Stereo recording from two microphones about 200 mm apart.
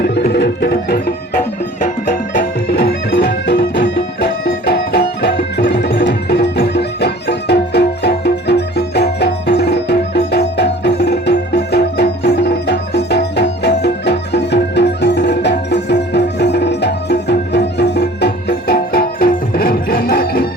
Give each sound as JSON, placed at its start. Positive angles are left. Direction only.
{"t": 0.0, "sound": "music", "side_deg": 55}
{"t": 2.4, "sound": "music", "side_deg": 55}